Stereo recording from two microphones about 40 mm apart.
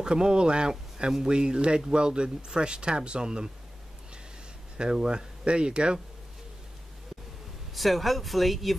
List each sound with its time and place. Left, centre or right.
0.0 s speech: right
4.9 s speech: centre
7.7 s speech: centre